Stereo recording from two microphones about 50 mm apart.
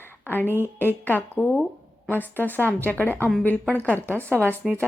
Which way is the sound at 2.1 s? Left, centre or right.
Left.